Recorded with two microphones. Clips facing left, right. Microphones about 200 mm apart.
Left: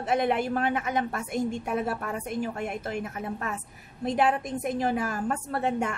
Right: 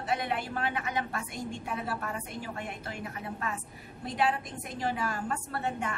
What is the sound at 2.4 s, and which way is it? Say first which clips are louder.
A woman's voice: left 7 dB; 45° left (ahead or behind).